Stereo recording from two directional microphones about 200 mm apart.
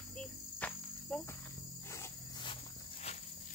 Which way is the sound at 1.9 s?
20° left (ahead or behind).